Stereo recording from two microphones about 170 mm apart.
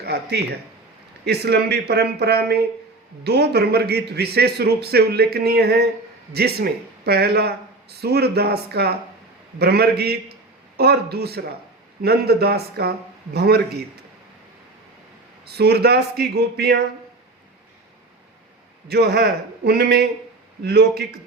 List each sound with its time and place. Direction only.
0.0 s a man's voice: 75° right (ahead or behind)
15.4 s a man's voice: 70° right (ahead or behind)
18.9 s a man's voice: 70° right (ahead or behind)